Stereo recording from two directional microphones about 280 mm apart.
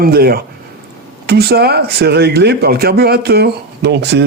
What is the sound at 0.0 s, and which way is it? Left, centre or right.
Speech, right.